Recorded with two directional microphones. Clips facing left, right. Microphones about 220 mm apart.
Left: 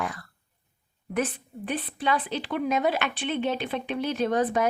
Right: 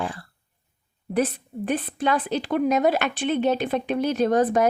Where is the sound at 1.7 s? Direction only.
45° right (ahead or behind).